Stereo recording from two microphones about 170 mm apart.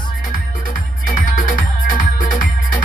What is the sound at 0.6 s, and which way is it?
Music, 55° left (ahead or behind).